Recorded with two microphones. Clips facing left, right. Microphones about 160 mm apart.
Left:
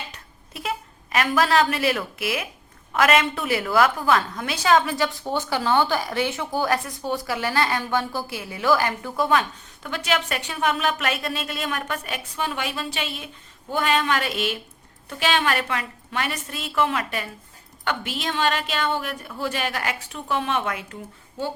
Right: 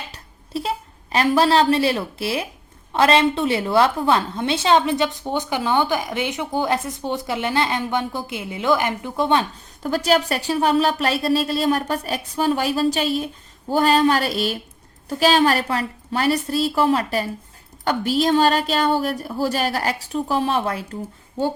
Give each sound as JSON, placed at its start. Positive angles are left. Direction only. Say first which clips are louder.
{"t": 0.1, "sound": "a woman's voice", "louder": "right 13 dB", "side_deg": -30}